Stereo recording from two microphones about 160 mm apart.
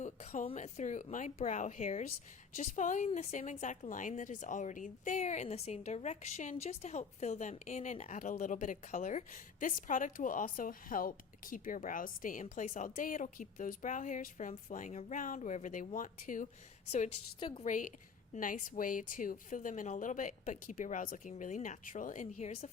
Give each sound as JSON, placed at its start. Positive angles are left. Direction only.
{"t": 0.0, "sound": "a woman's voice", "side_deg": 45}
{"t": 17.4, "sound": "a woman's voice", "side_deg": 30}
{"t": 17.7, "sound": "a woman's voice", "side_deg": 55}